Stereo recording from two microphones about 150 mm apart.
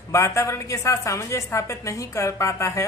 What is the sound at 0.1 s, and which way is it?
A woman's voice, 20° left (ahead or behind).